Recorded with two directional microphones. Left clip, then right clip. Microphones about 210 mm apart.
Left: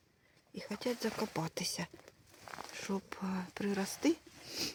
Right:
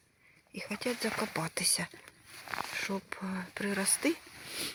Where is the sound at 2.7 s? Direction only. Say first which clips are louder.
Right 4 dB; 15° left (ahead or behind).